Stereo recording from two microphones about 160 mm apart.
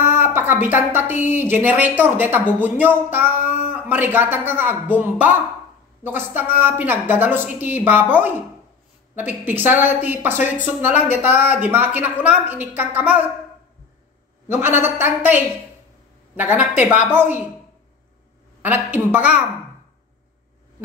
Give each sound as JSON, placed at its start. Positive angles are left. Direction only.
{"t": 0.2, "sound": "a woman's voice", "side_deg": -10}
{"t": 3.4, "sound": "a sound", "side_deg": 50}
{"t": 3.7, "sound": "speech", "side_deg": -10}
{"t": 14.5, "sound": "speech", "side_deg": -15}
{"t": 18.6, "sound": "speech", "side_deg": -10}